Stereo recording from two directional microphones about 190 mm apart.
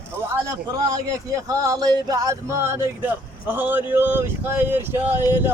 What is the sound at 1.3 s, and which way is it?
Speech, 20° right (ahead or behind).